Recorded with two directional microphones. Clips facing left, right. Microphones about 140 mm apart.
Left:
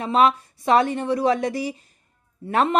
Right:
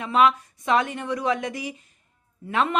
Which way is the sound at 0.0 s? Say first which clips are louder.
Left 2 dB; 35° left (ahead or behind).